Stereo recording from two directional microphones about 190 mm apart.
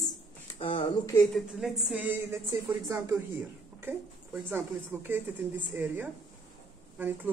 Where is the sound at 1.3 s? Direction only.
Centre (ahead or behind).